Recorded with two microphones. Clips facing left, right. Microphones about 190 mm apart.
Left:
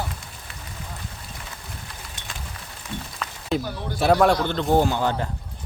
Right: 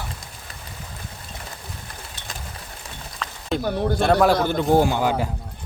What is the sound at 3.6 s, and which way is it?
Speech, 60° right (ahead or behind).